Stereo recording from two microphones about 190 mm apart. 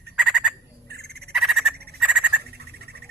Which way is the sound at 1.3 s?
Centre (ahead or behind).